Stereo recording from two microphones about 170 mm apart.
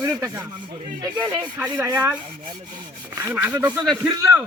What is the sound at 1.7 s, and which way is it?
Speech, 10° right (ahead or behind).